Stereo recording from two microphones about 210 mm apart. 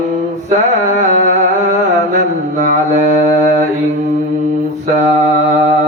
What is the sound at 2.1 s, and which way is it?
Mantra, 35° right (ahead or behind).